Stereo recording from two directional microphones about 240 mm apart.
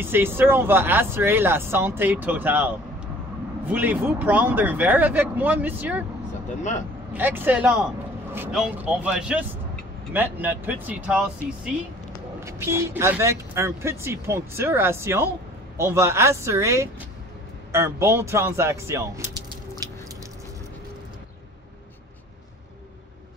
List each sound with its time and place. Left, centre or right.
0.0 s speech: centre
7.2 s speech: centre
12.4 s speech: centre